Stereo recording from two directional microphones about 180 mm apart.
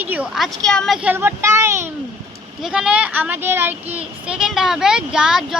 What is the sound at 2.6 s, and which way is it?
A woman's voice, 5° right (ahead or behind).